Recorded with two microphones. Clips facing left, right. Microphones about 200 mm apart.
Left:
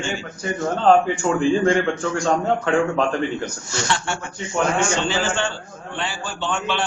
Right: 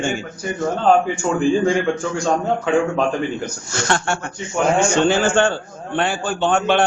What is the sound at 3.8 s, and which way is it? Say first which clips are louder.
A man's voice: right 5 dB; 50° right (ahead or behind).